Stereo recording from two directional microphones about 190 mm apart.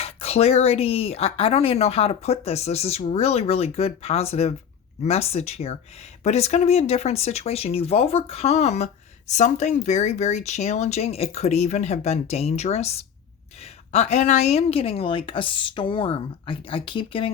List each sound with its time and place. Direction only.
0.0 s a woman's voice: 30° left (ahead or behind)